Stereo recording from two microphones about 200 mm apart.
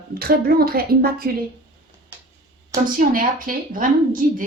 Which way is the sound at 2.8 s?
45° right (ahead or behind).